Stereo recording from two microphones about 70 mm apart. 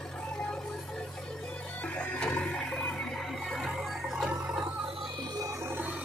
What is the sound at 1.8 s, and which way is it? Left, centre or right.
Music, centre.